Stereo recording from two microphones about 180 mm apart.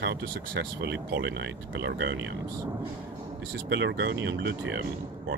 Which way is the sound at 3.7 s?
80° right.